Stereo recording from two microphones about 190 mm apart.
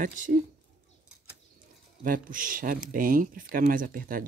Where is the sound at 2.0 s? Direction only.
45° right (ahead or behind).